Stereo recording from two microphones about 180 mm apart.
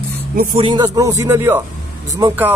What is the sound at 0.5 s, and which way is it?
Speech, 25° right (ahead or behind).